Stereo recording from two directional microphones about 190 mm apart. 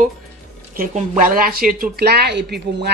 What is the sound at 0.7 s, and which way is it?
Speech, 45° right (ahead or behind).